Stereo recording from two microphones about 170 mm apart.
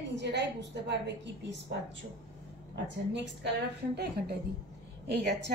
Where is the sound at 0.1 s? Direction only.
90° right.